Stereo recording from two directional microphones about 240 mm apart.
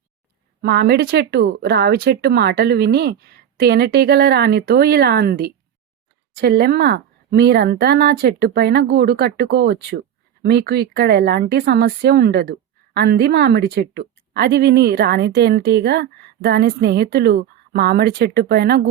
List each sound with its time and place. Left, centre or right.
0.6 s a woman's voice: right